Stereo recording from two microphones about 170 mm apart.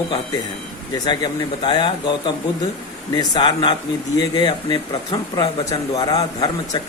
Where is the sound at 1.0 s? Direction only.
25° left (ahead or behind).